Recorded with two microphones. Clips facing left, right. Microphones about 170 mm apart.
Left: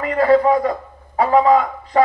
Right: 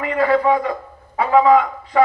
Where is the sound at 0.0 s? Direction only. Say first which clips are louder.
Left 3 dB; 40° left (ahead or behind).